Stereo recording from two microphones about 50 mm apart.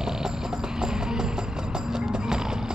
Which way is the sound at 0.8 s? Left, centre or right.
Centre.